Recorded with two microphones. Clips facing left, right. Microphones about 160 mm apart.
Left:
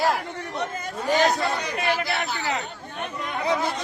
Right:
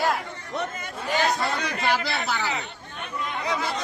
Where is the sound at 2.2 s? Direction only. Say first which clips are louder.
Right 2 dB; 90° right.